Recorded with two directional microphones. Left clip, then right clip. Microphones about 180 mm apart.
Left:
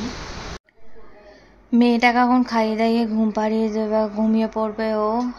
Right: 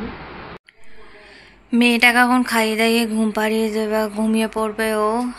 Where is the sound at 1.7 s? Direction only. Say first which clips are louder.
Right 3 dB; 15° left (ahead or behind).